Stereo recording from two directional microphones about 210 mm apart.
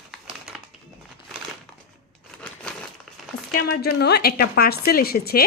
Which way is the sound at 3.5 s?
45° left (ahead or behind).